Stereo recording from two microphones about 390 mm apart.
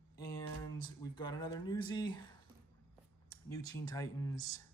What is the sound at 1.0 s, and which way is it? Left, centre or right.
Speech, centre.